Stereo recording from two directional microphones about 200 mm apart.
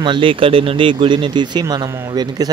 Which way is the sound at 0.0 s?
25° right (ahead or behind).